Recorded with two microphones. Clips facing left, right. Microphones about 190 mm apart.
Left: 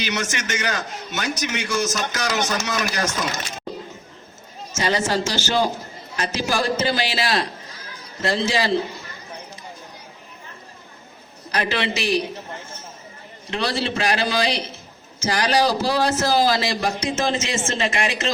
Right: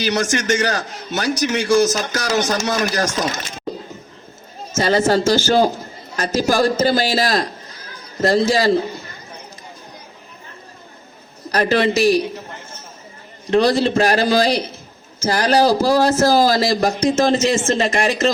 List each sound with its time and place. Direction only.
0.0 s a man's voice: 35° right (ahead or behind)
4.8 s a man's voice: 40° right (ahead or behind)
11.5 s a man's voice: 40° right (ahead or behind)
13.5 s a man's voice: 40° right (ahead or behind)